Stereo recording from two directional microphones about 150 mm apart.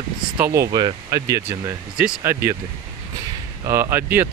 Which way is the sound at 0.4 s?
20° right (ahead or behind).